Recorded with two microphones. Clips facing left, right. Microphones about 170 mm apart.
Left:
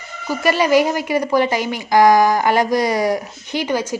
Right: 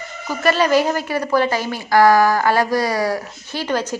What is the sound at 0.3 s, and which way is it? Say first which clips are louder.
Speech: left 1 dB; 10° left (ahead or behind).